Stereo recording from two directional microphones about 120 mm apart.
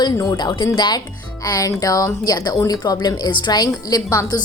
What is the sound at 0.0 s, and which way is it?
A woman's voice, 35° left (ahead or behind).